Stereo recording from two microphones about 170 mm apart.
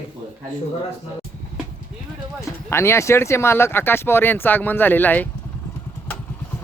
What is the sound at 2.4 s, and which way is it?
Speech, 15° left (ahead or behind).